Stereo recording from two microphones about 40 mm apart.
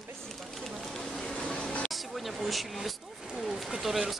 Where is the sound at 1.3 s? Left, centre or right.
Left.